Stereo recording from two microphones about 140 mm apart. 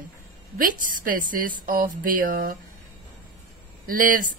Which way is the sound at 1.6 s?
85° right.